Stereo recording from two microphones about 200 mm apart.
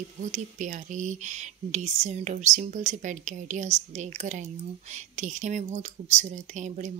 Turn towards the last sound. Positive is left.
turn(degrees=-35)  # may be behind; listen again after turning